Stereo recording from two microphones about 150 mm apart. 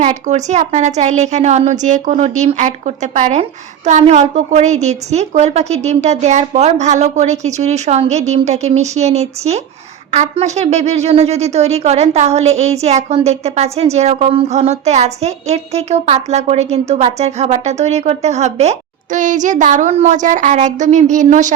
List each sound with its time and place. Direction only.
0.0 s speech: 50° right (ahead or behind)